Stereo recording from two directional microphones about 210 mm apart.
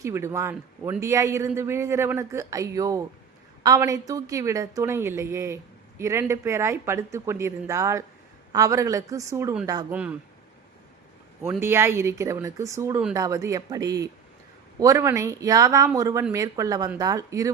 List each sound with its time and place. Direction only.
0.0 s a man's voice: 15° right (ahead or behind)
11.6 s a man's voice: 10° right (ahead or behind)